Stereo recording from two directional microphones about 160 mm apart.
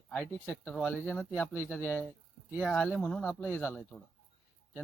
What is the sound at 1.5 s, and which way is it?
Speech, 10° right (ahead or behind).